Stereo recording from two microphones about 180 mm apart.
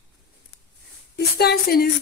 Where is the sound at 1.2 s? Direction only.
60° left (ahead or behind).